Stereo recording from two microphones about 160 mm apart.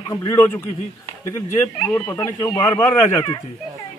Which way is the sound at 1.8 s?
15° left (ahead or behind).